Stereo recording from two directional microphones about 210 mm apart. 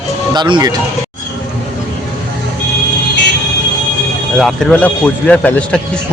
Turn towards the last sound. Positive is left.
turn(degrees=5)  # may be behind; listen again after turning